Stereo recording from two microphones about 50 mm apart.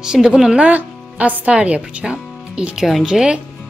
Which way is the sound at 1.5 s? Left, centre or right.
Right.